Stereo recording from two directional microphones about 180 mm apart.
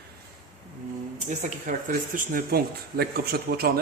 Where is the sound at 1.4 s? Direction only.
45° right (ahead or behind).